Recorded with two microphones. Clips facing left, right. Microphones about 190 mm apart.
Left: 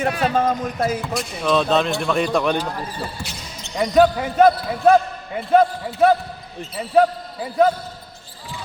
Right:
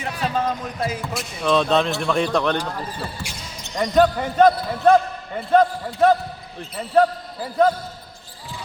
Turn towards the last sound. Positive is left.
turn(degrees=5)  # may be behind; listen again after turning